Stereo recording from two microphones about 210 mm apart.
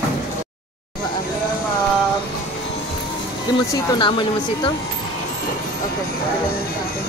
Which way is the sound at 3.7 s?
20° left (ahead or behind).